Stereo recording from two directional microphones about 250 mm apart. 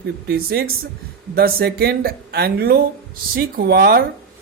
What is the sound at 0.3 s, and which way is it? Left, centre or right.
Speech, right.